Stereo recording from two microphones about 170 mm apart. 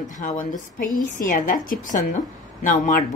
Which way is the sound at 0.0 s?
50° left (ahead or behind).